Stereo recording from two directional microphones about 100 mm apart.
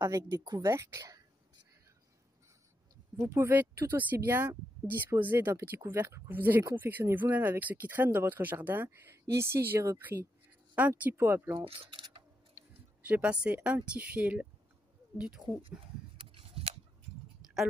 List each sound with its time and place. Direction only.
0.0 s speech: 40° right (ahead or behind)
0.7 s speech: 25° right (ahead or behind)
3.2 s speech: 20° right (ahead or behind)
11.6 s speech: 65° right (ahead or behind)
13.0 s speech: 15° right (ahead or behind)
16.3 s a sound: 75° right (ahead or behind)